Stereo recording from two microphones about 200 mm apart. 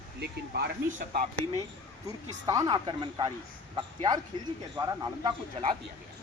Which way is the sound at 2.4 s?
20° right (ahead or behind).